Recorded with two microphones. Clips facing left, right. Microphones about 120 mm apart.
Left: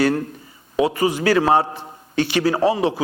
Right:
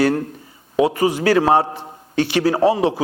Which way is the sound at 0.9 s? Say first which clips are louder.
Right 2 dB; 50° right (ahead or behind).